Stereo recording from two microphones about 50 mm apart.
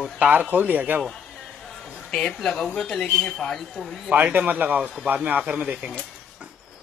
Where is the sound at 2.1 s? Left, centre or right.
Centre.